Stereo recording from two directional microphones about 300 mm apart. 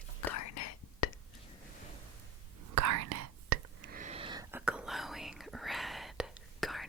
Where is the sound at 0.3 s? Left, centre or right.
Left.